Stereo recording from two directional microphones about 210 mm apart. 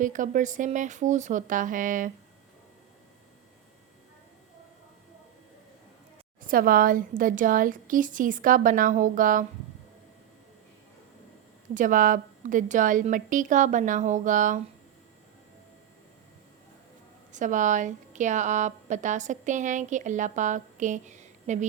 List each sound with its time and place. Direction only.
0.0 s a woman's voice: 35° right (ahead or behind)
6.4 s a woman's voice: 40° right (ahead or behind)
11.7 s a woman's voice: 40° right (ahead or behind)
17.3 s a woman's voice: 35° right (ahead or behind)